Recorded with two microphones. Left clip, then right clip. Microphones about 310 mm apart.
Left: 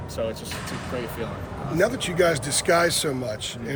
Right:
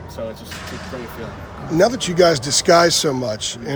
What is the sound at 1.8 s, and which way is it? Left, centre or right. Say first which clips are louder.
A man's voice: right 7 dB; centre.